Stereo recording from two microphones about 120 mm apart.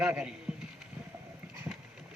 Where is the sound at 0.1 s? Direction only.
10° right (ahead or behind).